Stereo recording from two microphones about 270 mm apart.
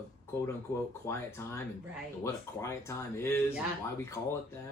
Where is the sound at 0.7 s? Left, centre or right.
Left.